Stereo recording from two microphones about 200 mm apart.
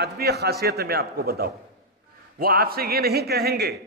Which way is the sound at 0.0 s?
55° right (ahead or behind).